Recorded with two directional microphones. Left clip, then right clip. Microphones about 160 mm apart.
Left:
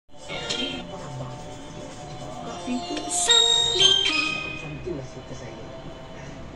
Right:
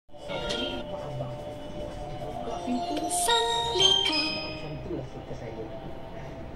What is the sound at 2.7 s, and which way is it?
Music, 20° right (ahead or behind).